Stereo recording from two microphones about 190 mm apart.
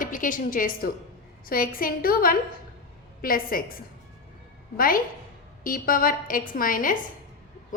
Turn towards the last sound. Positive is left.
turn(degrees=45)  # may be behind; listen again after turning